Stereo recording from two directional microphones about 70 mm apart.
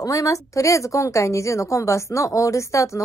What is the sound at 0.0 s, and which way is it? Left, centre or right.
A woman's voice, left.